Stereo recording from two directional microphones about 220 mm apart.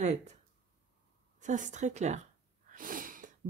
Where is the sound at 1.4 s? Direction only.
35° right (ahead or behind).